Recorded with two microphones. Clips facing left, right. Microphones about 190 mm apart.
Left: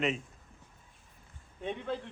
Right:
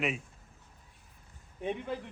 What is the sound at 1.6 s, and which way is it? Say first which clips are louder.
Speech: right 1 dB; 10° right (ahead or behind).